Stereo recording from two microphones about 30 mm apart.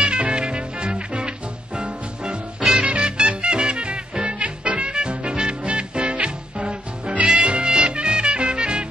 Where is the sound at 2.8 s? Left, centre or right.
Right.